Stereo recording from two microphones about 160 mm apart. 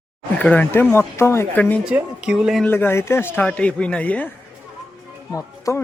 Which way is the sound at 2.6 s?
15° left (ahead or behind).